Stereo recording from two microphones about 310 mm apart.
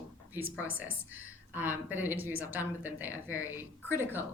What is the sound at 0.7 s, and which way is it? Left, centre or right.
Speech, left.